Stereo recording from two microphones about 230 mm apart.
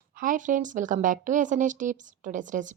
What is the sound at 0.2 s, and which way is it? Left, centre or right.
Speech, right.